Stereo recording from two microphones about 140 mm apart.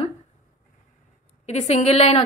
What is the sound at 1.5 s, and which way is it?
Speech, 50° left (ahead or behind).